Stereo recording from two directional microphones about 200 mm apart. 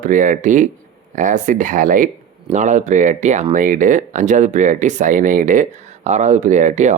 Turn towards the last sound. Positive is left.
turn(degrees=-35)  # may be behind; listen again after turning